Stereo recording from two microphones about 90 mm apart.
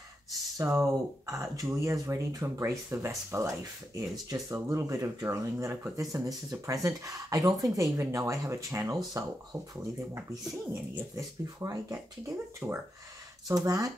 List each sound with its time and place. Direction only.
0.3 s speech: 40° right (ahead or behind)
10.7 s speech: 35° right (ahead or behind)
12.6 s speech: 25° right (ahead or behind)
13.5 s speech: 40° right (ahead or behind)